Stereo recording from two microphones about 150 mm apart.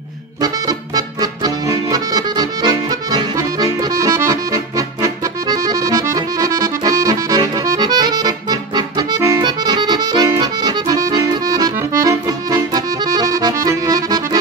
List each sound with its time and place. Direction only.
0.4 s accordion: 25° right (ahead or behind)